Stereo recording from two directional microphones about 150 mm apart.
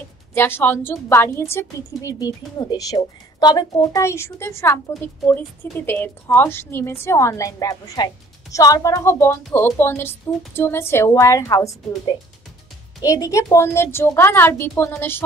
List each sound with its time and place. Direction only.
0.3 s a woman's voice: 15° left (ahead or behind)
13.0 s a woman's voice: 20° left (ahead or behind)